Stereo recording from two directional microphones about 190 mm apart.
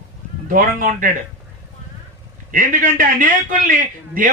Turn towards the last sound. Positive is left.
turn(degrees=-45)  # may be behind; listen again after turning